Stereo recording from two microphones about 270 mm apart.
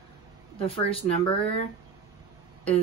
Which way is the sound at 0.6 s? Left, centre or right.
Left.